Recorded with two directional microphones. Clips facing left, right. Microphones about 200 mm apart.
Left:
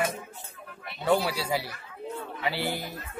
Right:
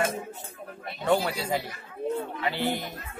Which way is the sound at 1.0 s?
5° left (ahead or behind).